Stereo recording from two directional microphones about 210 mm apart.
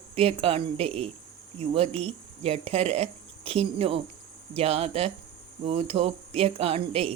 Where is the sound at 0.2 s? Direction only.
30° right (ahead or behind).